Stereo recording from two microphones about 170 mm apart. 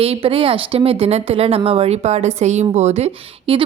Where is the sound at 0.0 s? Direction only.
35° right (ahead or behind).